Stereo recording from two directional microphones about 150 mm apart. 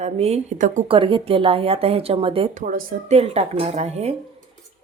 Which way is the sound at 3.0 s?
45° right (ahead or behind).